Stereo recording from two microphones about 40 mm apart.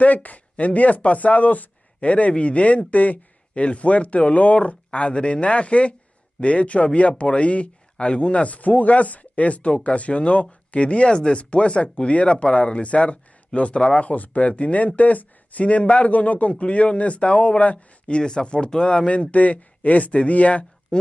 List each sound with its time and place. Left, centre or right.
0.0 s speech: left
14.1 s speech: left